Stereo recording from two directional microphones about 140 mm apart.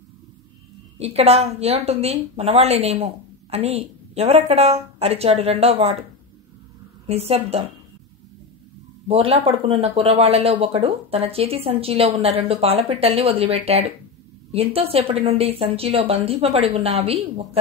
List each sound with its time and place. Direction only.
0.9 s a woman's voice: 45° right (ahead or behind)
7.1 s a woman's voice: 45° right (ahead or behind)
9.0 s a woman's voice: 45° right (ahead or behind)